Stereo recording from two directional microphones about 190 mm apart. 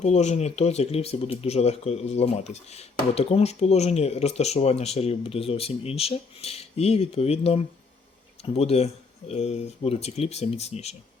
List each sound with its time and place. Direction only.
0.0 s speech: 35° left (ahead or behind)